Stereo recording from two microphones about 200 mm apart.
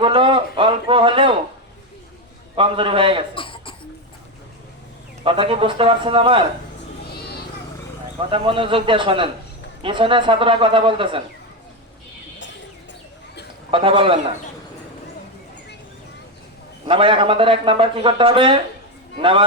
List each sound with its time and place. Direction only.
0.0 s speech: 25° right (ahead or behind)
2.6 s speech: 25° right (ahead or behind)
3.3 s cough: 25° left (ahead or behind)
5.2 s speech: 25° right (ahead or behind)
8.3 s speech: 25° right (ahead or behind)
13.7 s speech: 25° right (ahead or behind)
16.8 s speech: 25° right (ahead or behind)